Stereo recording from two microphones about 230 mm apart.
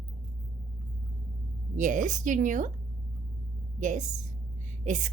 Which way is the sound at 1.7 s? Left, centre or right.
Right.